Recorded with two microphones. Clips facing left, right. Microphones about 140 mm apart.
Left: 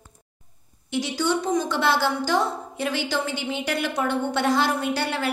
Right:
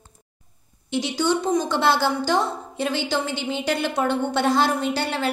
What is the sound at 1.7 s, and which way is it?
A woman's voice, 30° right (ahead or behind).